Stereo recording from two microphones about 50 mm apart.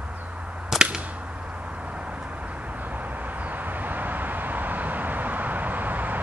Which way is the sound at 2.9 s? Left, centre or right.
Right.